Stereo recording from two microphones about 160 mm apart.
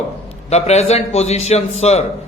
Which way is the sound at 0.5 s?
45° left (ahead or behind).